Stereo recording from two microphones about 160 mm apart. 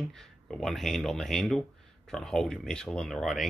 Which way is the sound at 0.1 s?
5° left (ahead or behind).